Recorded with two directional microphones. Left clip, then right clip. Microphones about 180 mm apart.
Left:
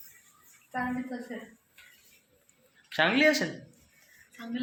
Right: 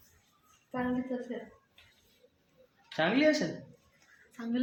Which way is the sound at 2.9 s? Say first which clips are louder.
Left 4 dB; centre (ahead or behind).